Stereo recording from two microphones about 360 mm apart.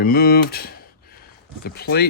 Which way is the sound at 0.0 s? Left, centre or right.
Left.